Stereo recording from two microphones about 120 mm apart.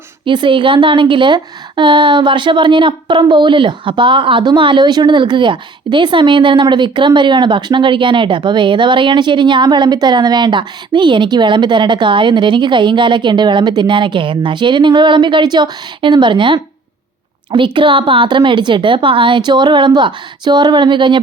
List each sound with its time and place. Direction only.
0.3 s a woman's voice: 45° right (ahead or behind)